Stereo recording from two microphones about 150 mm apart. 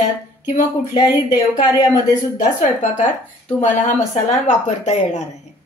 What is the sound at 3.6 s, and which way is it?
Speech, 50° left (ahead or behind).